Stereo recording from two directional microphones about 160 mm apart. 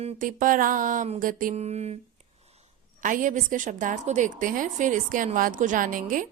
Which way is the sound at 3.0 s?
55° right (ahead or behind).